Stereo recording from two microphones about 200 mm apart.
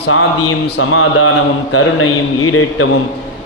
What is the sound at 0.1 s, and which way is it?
Speech, 90° left.